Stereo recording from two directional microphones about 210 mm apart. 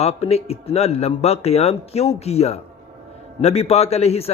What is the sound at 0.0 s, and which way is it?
Speech, 30° left (ahead or behind).